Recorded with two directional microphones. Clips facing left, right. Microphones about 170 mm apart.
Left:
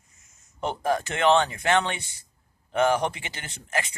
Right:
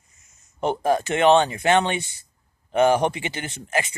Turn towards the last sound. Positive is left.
turn(degrees=-20)  # may be behind; listen again after turning